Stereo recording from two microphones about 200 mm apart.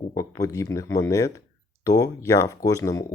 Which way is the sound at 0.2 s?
15° left (ahead or behind).